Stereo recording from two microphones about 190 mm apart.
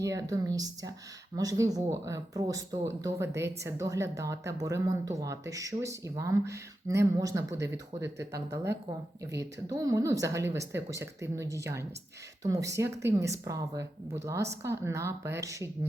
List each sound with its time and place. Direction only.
0.0 s speech: 15° right (ahead or behind)